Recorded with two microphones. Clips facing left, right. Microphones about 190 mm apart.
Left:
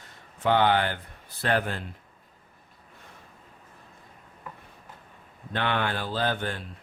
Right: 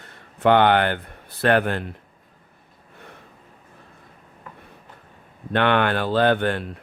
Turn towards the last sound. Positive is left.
turn(degrees=-65)  # may be behind; listen again after turning